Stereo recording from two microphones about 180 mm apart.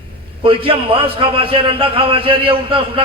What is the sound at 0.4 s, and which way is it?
A man's voice, 30° right (ahead or behind).